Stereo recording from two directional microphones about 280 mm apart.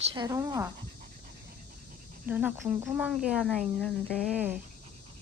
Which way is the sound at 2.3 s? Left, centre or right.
Centre.